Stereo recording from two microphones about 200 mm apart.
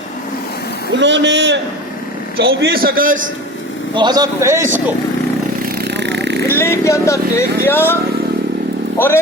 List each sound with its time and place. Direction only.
0.9 s a man's voice: 65° right (ahead or behind)
2.5 s a man's voice: 50° right (ahead or behind)
3.9 s a man's voice: 20° right (ahead or behind)
5.9 s vehicle: 60° right (ahead or behind)
6.5 s a woman's voice: 15° left (ahead or behind)